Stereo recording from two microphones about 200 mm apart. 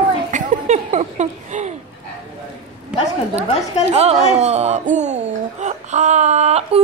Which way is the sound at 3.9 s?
30° right (ahead or behind).